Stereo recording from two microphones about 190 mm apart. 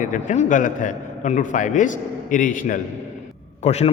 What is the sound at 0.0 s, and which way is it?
A man's voice, 40° left (ahead or behind).